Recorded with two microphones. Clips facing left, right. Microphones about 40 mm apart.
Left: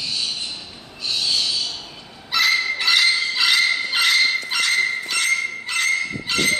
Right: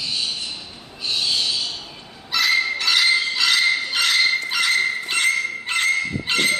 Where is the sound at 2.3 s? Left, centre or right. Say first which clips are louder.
Even; centre.